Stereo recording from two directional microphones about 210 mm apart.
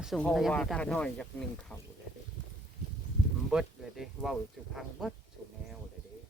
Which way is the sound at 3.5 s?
Centre (ahead or behind).